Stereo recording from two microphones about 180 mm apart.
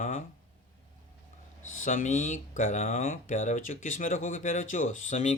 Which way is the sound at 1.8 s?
45° left (ahead or behind).